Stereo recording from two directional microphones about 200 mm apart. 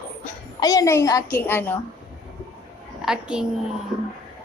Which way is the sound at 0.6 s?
20° left (ahead or behind).